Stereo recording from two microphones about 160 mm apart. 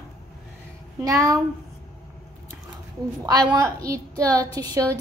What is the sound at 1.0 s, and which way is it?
Speech, 20° right (ahead or behind).